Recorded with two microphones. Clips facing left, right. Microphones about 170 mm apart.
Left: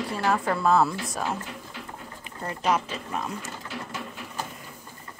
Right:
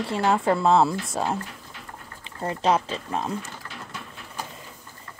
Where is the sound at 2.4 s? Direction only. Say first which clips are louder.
Right 3 dB; 30° right (ahead or behind).